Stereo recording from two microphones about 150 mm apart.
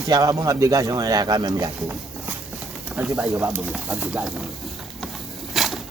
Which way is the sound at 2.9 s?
10° right (ahead or behind).